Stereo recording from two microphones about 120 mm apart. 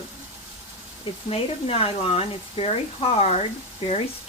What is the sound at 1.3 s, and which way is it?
Speech, 55° left (ahead or behind).